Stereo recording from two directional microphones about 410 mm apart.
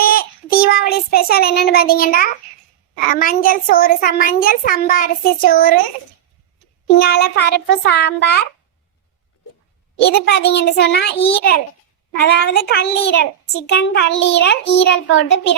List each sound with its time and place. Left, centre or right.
0.0 s child singing: left
3.1 s a child's voice: centre
7.0 s a child's voice: left
10.0 s a child's voice: left